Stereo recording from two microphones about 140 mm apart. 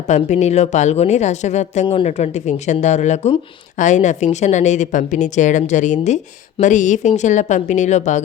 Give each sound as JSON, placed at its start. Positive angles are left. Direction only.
{"t": 0.1, "sound": "a woman's voice", "side_deg": 55}